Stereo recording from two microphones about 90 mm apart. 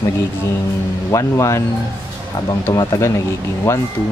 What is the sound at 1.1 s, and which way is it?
Speech, 35° left (ahead or behind).